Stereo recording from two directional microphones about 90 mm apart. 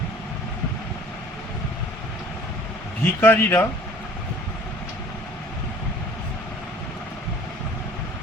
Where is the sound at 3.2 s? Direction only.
20° left (ahead or behind).